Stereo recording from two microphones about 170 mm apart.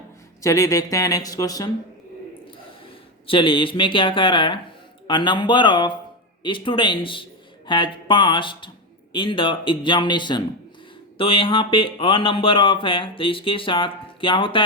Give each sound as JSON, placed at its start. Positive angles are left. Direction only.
{"t": 0.4, "sound": "speech", "side_deg": 20}
{"t": 3.2, "sound": "speech", "side_deg": 30}